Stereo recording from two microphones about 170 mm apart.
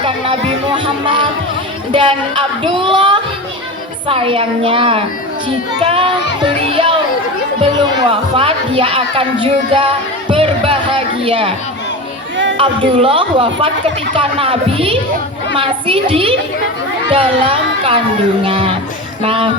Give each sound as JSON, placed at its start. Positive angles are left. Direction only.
{"t": 0.0, "sound": "music", "side_deg": -30}
{"t": 1.9, "sound": "a woman's voice", "side_deg": -30}
{"t": 6.4, "sound": "children playing", "side_deg": -30}
{"t": 7.6, "sound": "speech", "side_deg": -30}
{"t": 12.5, "sound": "speech", "side_deg": -30}